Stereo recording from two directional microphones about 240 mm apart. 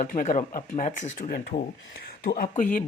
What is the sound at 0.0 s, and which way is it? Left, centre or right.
Speech, left.